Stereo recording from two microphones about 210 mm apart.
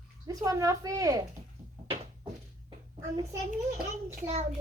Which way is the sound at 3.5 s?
40° right (ahead or behind).